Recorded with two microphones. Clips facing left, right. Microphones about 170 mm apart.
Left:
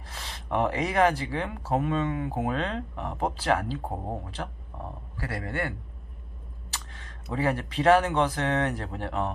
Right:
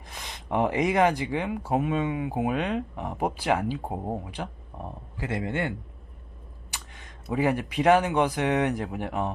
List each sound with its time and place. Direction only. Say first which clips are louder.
0.1 s speech: right 1 dB; 15° right (ahead or behind)